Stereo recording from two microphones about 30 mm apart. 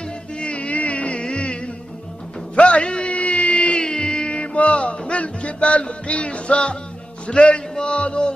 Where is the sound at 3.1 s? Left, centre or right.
Left.